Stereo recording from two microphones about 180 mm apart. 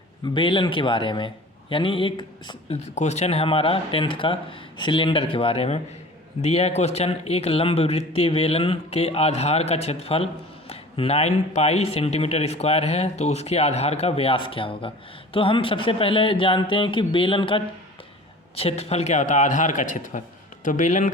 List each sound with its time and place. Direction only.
0.3 s speech: 25° left (ahead or behind)
2.9 s a man's voice: 40° left (ahead or behind)